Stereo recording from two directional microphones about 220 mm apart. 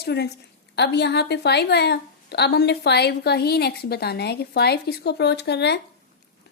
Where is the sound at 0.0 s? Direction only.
50° left (ahead or behind).